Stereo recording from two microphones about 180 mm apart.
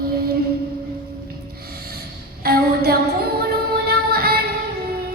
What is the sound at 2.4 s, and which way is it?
Music, 60° right (ahead or behind).